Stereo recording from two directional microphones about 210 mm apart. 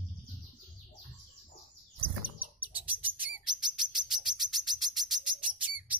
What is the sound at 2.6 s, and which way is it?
Bird, 5° right (ahead or behind).